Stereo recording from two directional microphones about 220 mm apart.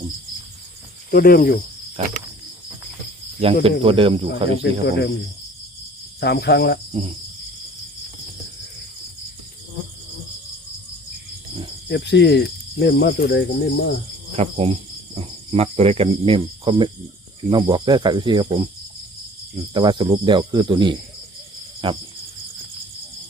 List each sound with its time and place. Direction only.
1.1 s cricket: 40° left (ahead or behind)
2.0 s speech: 30° right (ahead or behind)
3.4 s speech: 25° right (ahead or behind)
4.6 s cricket: 50° left (ahead or behind)
6.1 s cricket: 50° left (ahead or behind)
11.9 s cricket: 50° left (ahead or behind)
14.3 s cricket: 25° right (ahead or behind)
17.5 s speech: 20° right (ahead or behind)
19.7 s speech: 20° right (ahead or behind)